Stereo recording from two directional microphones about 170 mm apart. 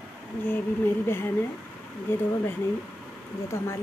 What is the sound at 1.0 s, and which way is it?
Speech, 15° left (ahead or behind).